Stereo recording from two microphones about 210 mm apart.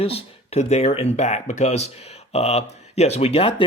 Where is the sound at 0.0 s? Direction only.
30° left (ahead or behind).